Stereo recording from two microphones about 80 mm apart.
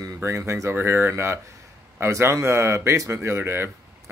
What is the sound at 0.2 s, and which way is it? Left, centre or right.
Speech, right.